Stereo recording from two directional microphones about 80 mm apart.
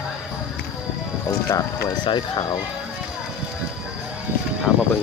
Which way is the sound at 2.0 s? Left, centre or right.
Left.